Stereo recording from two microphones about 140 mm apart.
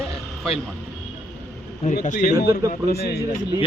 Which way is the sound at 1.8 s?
65° left (ahead or behind).